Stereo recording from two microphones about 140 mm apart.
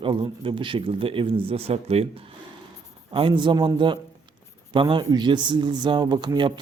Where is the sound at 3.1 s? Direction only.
40° right (ahead or behind).